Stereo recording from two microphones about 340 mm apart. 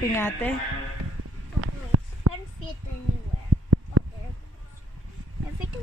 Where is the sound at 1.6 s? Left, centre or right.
Right.